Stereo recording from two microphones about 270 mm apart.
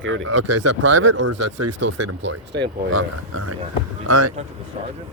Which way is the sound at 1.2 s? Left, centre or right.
Right.